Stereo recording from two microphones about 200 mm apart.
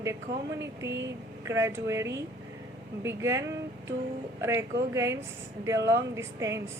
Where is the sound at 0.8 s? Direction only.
60° right (ahead or behind).